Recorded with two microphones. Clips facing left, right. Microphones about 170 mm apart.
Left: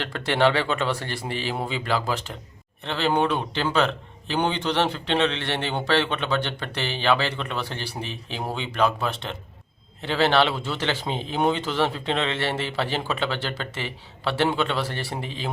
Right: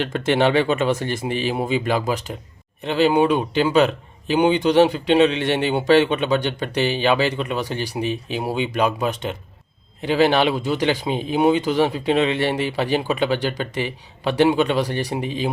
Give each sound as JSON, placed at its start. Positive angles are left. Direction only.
{"t": 0.0, "sound": "speech", "side_deg": -20}